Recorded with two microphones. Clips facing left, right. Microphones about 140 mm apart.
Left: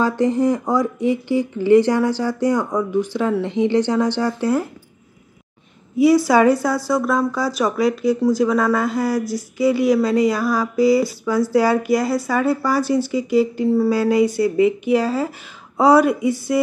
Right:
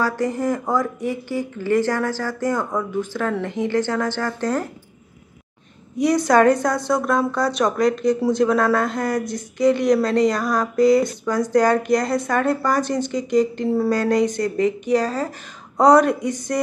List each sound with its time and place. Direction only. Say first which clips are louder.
0.0 s speech: left 4 dB; 20° left (ahead or behind)
5.9 s speech: left 3 dB; 5° left (ahead or behind)